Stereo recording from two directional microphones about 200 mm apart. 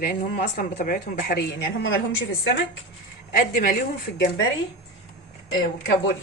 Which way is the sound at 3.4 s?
45° left (ahead or behind).